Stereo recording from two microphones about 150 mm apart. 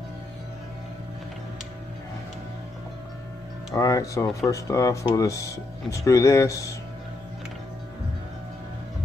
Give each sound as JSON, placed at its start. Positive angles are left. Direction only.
{"t": 3.7, "sound": "speech", "side_deg": 25}